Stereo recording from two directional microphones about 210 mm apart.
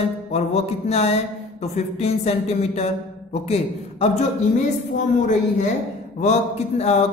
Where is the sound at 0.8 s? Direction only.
30° left (ahead or behind).